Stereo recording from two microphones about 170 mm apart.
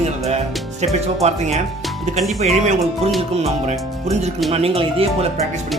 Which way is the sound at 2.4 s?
40° right (ahead or behind).